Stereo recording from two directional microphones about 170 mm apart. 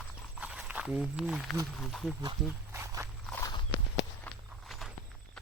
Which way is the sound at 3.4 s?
30° left (ahead or behind).